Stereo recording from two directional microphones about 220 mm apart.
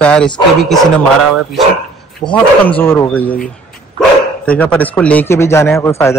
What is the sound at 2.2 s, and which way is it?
A man's voice, 15° left (ahead or behind).